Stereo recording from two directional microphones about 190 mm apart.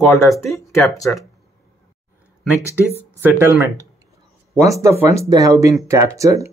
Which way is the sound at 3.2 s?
10° right (ahead or behind).